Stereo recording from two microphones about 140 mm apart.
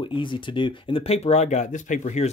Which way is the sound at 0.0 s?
35° left (ahead or behind).